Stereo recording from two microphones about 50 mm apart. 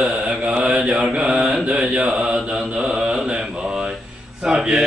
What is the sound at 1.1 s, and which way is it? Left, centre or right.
Mantra, centre.